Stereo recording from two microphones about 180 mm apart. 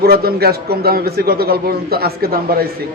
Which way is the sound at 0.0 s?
60° right (ahead or behind).